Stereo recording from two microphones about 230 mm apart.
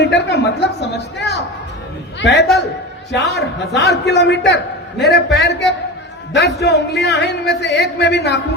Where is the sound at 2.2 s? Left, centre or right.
Left.